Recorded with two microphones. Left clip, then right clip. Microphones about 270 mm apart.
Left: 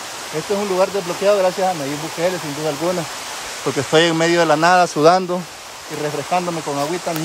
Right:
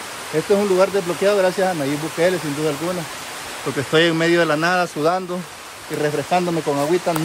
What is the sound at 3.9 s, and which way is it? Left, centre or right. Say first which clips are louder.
Speech: left 1 dB; centre.